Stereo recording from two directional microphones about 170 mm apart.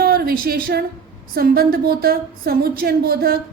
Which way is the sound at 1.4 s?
65° right (ahead or behind).